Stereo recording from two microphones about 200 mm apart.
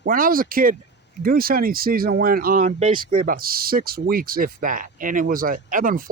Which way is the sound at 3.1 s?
45° right (ahead or behind).